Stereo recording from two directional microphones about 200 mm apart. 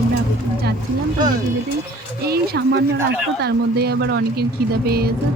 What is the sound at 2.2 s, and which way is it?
Speech, 55° right (ahead or behind).